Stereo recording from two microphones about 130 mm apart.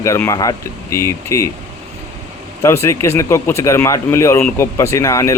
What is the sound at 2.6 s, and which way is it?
Speech, 20° left (ahead or behind).